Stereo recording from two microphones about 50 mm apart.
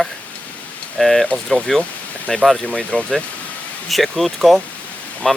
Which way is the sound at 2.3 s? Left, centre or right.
Left.